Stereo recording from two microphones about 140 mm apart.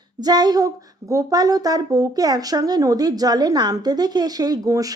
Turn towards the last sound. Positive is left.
turn(degrees=-25)  # may be behind; listen again after turning